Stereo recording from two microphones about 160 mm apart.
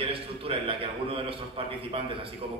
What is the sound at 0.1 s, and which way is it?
A man's voice, 35° right (ahead or behind).